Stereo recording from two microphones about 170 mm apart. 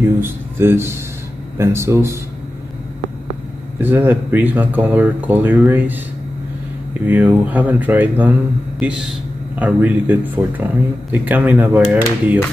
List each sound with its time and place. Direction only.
0.2 s speech: 15° right (ahead or behind)
3.8 s a man's voice: 10° right (ahead or behind)